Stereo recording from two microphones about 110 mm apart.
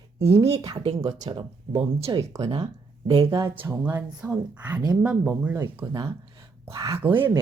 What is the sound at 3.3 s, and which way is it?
Speech, 25° right (ahead or behind).